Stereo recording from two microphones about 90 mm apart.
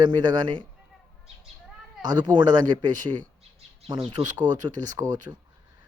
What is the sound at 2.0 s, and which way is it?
Speech, 50° right (ahead or behind).